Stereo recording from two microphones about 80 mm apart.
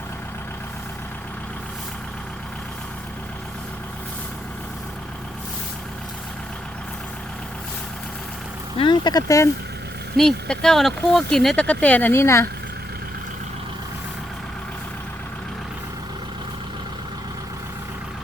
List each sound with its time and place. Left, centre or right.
8.8 s a sound: left
9.2 s speech: left
10.2 s speech: centre
11.6 s speech: centre
12.1 s speech: left